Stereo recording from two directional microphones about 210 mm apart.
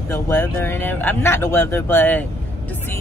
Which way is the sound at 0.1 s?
10° left (ahead or behind).